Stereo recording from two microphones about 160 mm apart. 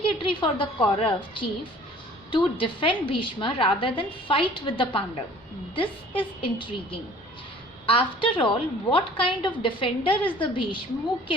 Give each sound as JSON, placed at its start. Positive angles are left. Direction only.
{"t": 0.0, "sound": "a woman's voice", "side_deg": 30}